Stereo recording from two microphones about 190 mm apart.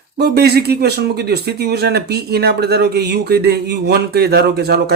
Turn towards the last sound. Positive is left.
turn(degrees=-55)  # may be behind; listen again after turning